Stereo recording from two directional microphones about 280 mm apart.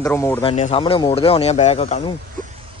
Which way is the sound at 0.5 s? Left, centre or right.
Left.